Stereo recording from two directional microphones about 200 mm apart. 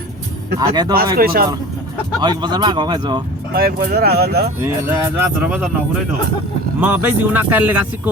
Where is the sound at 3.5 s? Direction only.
50° right (ahead or behind).